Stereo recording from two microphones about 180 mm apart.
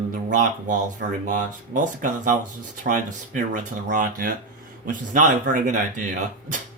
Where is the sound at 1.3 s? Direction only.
45° right (ahead or behind).